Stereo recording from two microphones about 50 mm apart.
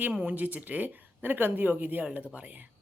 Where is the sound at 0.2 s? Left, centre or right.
Right.